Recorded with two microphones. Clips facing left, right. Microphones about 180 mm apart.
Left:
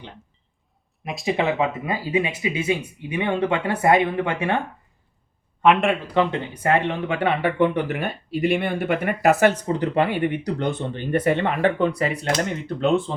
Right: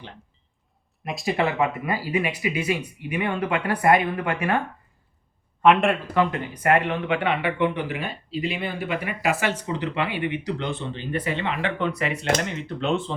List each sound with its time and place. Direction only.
1.0 s speech: centre (ahead or behind)
1.4 s speech: 20° left (ahead or behind)
5.6 s speech: centre (ahead or behind)
6.1 s speech: 25° left (ahead or behind)
7.1 s speech: 40° left (ahead or behind)